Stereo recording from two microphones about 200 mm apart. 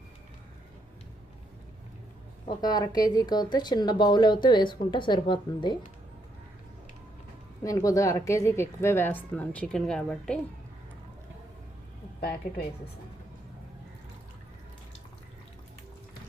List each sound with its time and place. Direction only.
2.6 s speech: 20° left (ahead or behind)
7.6 s speech: 15° left (ahead or behind)